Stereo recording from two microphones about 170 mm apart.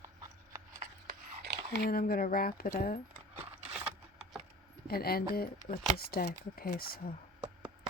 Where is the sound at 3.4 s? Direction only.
5° right (ahead or behind).